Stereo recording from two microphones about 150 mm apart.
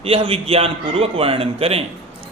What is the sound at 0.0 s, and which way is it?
A man's voice, 40° right (ahead or behind).